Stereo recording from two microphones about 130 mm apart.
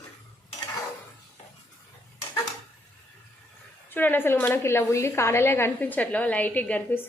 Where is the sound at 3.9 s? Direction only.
15° left (ahead or behind).